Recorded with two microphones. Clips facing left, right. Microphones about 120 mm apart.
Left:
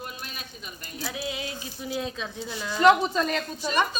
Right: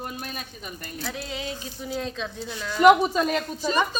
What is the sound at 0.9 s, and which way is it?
A woman's voice, 5° left (ahead or behind).